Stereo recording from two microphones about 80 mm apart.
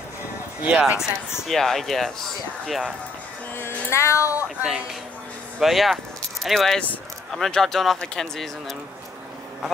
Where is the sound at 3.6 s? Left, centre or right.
Left.